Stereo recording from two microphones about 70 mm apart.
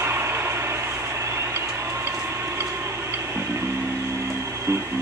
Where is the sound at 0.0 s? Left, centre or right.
Right.